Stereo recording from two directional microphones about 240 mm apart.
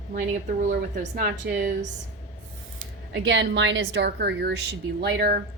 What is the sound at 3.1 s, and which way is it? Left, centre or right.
A woman's voice, right.